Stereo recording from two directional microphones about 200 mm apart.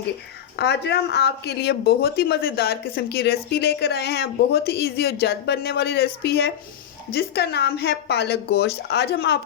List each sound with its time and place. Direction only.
0.5 s speech: 55° left (ahead or behind)